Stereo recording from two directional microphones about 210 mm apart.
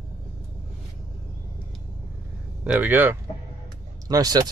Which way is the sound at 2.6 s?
5° right (ahead or behind).